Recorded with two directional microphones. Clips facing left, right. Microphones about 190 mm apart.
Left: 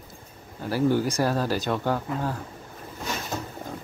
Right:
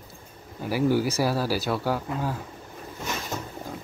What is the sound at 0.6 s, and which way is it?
Speech, 10° right (ahead or behind).